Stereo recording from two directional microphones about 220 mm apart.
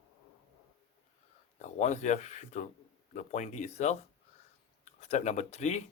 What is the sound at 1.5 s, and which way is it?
Speech, 35° left (ahead or behind).